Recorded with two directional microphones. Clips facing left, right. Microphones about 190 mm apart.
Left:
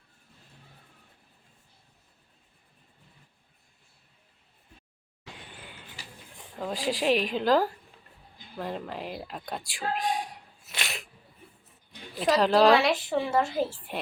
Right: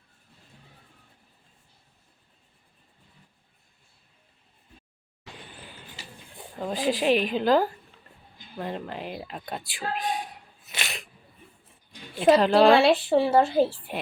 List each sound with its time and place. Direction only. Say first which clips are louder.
6.6 s a woman's voice: right 3 dB; centre (ahead or behind)
12.4 s a woman's voice: left 1 dB; centre (ahead or behind)
12.7 s a woman's voice: right 5 dB; 30° right (ahead or behind)
13.7 s a woman's voice: right 2 dB; centre (ahead or behind)